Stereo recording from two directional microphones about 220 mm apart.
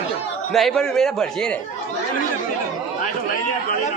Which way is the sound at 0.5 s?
Centre (ahead or behind).